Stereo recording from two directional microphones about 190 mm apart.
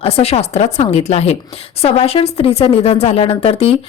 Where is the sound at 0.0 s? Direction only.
30° left (ahead or behind).